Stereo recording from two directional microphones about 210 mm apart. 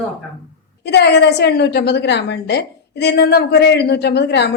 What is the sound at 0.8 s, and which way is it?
A woman's voice, 55° left (ahead or behind).